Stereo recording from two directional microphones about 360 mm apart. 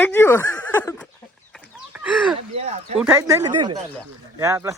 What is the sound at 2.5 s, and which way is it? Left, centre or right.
Speech, centre.